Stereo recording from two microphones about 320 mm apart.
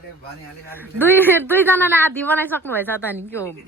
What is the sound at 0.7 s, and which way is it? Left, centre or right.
Speech, centre.